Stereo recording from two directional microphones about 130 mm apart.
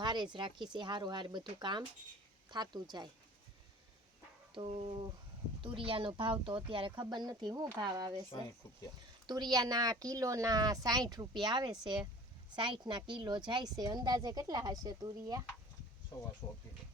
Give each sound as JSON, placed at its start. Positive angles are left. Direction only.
{"t": 0.0, "sound": "speech", "side_deg": -35}
{"t": 4.5, "sound": "speech", "side_deg": -50}
{"t": 9.2, "sound": "speech", "side_deg": -30}